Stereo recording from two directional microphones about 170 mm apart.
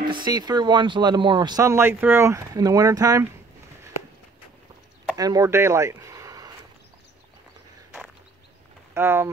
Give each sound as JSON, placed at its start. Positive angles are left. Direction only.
{"t": 0.0, "sound": "speech", "side_deg": -25}
{"t": 5.1, "sound": "speech", "side_deg": -20}
{"t": 8.9, "sound": "speech", "side_deg": -15}